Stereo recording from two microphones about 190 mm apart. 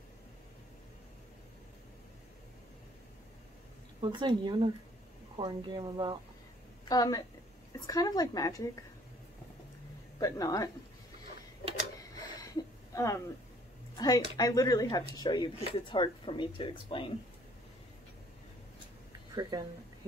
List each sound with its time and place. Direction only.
4.0 s speech: 25° right (ahead or behind)
6.9 s speech: 20° left (ahead or behind)
10.1 s speech: 20° left (ahead or behind)
12.0 s a sound: 15° left (ahead or behind)
13.9 s speech: 20° left (ahead or behind)
19.4 s speech: 20° right (ahead or behind)